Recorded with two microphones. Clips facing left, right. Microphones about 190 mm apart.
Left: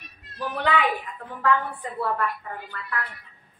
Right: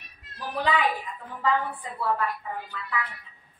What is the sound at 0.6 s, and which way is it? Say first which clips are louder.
A woman's voice: left 1 dB; 65° left (ahead or behind).